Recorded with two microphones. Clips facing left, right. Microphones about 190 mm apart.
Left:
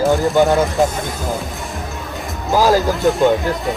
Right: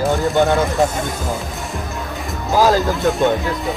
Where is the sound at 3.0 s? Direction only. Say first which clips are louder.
Left 2 dB; centre (ahead or behind).